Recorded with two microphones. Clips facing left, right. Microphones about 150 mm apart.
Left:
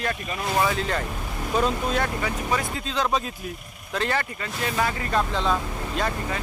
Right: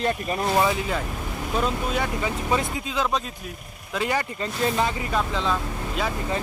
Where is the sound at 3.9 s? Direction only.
10° right (ahead or behind).